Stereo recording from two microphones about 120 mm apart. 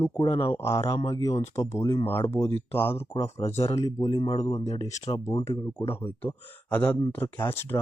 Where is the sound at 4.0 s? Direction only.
45° left (ahead or behind).